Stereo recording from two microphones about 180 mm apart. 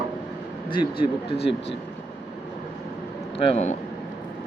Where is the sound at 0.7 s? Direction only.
30° left (ahead or behind).